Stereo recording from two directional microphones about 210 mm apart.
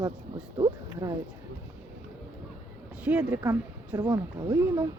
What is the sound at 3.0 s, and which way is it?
Speech, 5° right (ahead or behind).